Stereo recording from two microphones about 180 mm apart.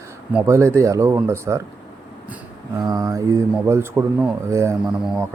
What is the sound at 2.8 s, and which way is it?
Speech, 20° right (ahead or behind).